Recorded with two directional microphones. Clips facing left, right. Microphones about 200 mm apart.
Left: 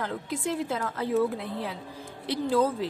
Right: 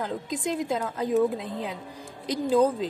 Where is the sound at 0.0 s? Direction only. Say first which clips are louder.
Right 1 dB; 15° right (ahead or behind).